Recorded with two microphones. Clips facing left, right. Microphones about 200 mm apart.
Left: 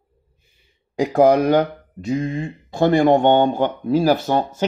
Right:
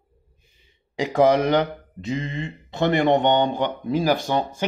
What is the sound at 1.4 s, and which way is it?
Speech, 10° left (ahead or behind).